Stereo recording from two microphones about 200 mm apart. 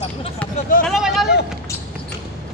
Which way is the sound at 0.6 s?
45° left (ahead or behind).